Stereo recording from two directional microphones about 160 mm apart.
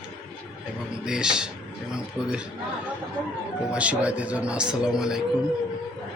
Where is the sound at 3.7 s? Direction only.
10° right (ahead or behind).